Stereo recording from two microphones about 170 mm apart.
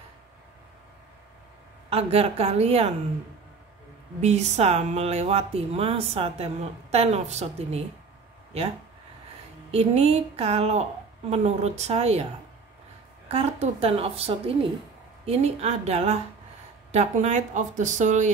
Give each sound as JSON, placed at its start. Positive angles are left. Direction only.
{"t": 1.9, "sound": "speech", "side_deg": -35}
{"t": 4.2, "sound": "speech", "side_deg": -40}
{"t": 9.7, "sound": "speech", "side_deg": -35}
{"t": 13.3, "sound": "speech", "side_deg": -35}